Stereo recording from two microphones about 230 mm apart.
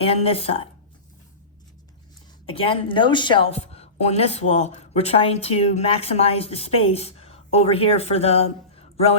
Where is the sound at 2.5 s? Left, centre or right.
Left.